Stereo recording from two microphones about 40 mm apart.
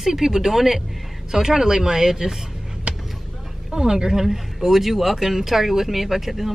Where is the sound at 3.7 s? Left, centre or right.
Centre.